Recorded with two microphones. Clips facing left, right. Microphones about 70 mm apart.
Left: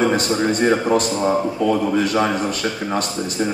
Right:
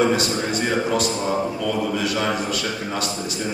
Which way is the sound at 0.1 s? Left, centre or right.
Left.